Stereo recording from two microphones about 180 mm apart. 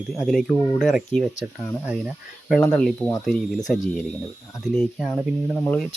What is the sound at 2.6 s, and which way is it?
Speech, 5° left (ahead or behind).